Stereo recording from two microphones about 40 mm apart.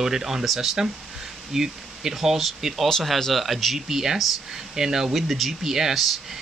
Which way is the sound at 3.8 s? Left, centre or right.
Centre.